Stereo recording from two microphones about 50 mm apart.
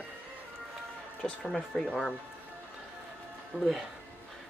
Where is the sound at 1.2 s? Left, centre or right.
Centre.